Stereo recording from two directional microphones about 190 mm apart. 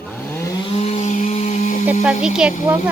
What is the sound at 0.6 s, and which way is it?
Chainsaw, 35° left (ahead or behind).